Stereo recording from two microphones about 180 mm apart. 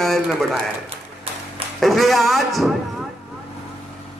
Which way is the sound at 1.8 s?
Centre (ahead or behind).